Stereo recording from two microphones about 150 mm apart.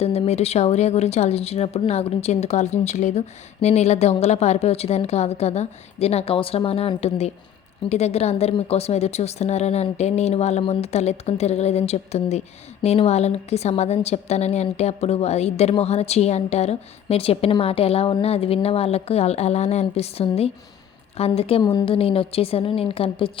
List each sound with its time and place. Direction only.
0.0 s a woman's voice: 40° left (ahead or behind)